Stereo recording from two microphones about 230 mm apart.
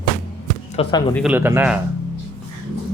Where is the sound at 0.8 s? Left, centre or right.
Left.